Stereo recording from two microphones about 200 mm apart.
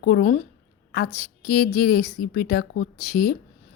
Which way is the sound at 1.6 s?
55° left (ahead or behind).